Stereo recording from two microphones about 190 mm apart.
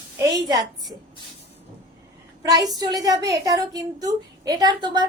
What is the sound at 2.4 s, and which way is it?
A woman's voice, 20° right (ahead or behind).